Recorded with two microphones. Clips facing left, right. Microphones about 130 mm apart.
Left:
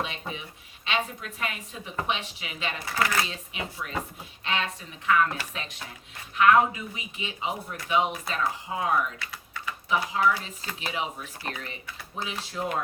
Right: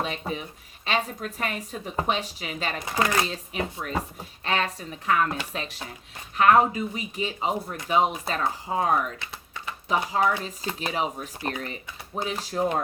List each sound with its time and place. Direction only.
0.0 s a woman's voice: 40° right (ahead or behind)
2.8 s speech: 20° right (ahead or behind)
3.2 s speech: 40° right (ahead or behind)
9.1 s typing: 25° right (ahead or behind)
9.9 s speech: 40° right (ahead or behind)